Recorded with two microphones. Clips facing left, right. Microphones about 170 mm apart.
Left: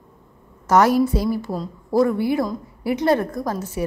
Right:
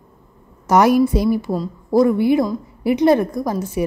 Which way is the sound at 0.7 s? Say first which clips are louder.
Right 2 dB; 15° right (ahead or behind).